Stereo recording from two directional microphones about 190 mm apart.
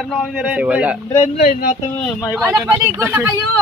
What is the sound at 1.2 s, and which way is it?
Speech, 40° left (ahead or behind).